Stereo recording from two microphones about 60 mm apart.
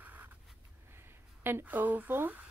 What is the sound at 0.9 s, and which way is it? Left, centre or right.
Speech, right.